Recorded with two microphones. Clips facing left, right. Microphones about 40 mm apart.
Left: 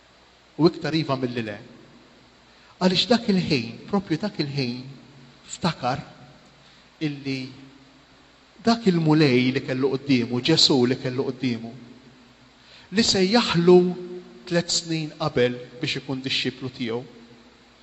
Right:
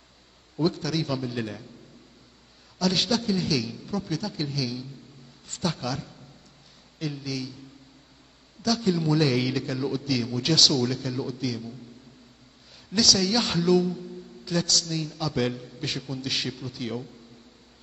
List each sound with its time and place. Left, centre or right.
0.6 s a man's voice: left
2.8 s a man's voice: left
8.6 s a man's voice: left
12.9 s a man's voice: left